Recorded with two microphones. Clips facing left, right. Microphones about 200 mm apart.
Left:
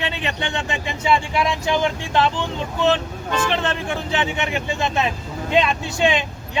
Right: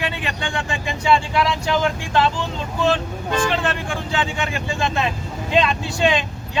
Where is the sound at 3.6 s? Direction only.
25° left (ahead or behind).